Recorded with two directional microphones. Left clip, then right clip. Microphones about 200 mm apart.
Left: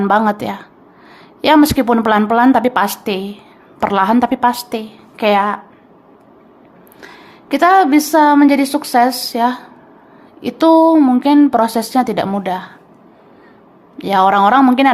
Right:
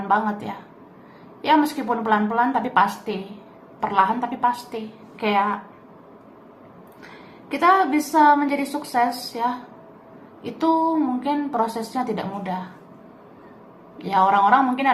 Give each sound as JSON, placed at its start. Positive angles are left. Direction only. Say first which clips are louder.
{"t": 0.1, "sound": "a woman's voice", "louder": "left 5 dB", "side_deg": 55}
{"t": 7.0, "sound": "a woman's voice", "louder": "left 7 dB", "side_deg": 50}
{"t": 14.0, "sound": "a woman's voice", "louder": "left 6 dB", "side_deg": 55}